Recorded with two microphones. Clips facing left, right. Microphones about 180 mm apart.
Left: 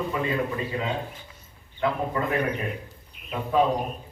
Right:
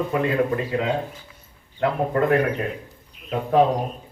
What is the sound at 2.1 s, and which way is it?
Speech, 60° right (ahead or behind).